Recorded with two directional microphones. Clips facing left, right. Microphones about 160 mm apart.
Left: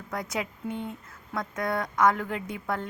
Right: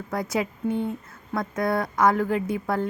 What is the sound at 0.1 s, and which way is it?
Speech, 5° right (ahead or behind).